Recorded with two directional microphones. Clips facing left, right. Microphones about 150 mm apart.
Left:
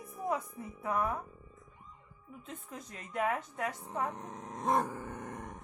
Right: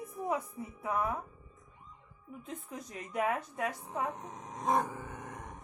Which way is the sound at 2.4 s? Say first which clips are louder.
Right 2 dB; 15° right (ahead or behind).